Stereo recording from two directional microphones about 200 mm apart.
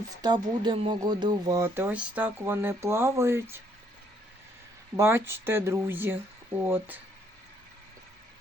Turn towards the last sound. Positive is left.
turn(degrees=-10)  # may be behind; listen again after turning